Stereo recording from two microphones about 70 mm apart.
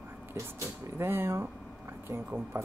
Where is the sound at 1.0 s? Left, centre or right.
Right.